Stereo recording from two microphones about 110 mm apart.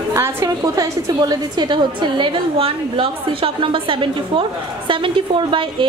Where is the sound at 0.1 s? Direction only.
25° right (ahead or behind).